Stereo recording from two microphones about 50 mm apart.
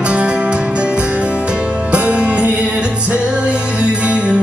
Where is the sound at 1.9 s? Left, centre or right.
Right.